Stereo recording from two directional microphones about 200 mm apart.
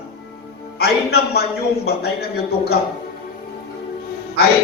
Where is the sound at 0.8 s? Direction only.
50° left (ahead or behind).